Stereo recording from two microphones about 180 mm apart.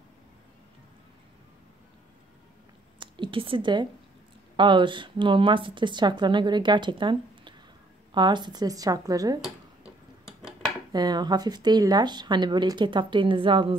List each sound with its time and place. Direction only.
3.0 s a woman's voice: 30° right (ahead or behind)
9.8 s tick-tock: 5° right (ahead or behind)
10.9 s speech: 25° right (ahead or behind)